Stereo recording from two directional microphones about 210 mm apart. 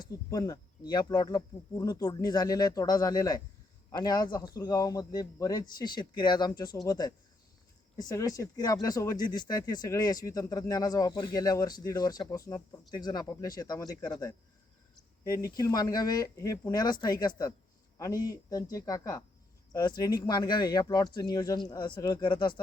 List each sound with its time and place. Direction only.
0.0 s speech: 15° left (ahead or behind)
17.9 s a sound: 15° left (ahead or behind)
18.3 s speech: 15° left (ahead or behind)